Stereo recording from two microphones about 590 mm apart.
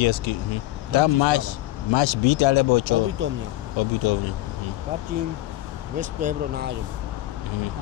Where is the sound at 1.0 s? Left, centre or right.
Left.